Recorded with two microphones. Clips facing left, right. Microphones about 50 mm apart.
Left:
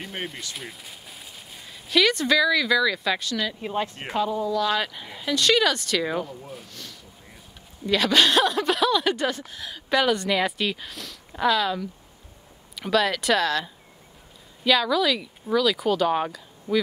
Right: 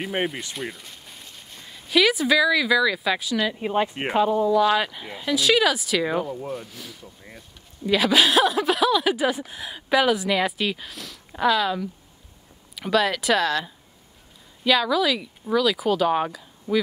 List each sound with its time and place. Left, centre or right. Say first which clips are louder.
0.6 s speech: right 5 dB; centre